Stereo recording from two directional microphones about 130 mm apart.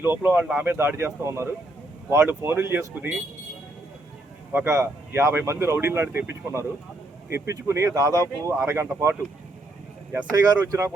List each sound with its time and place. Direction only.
0.0 s speech: 15° right (ahead or behind)
4.5 s speech: 20° right (ahead or behind)
10.2 s speech: 30° right (ahead or behind)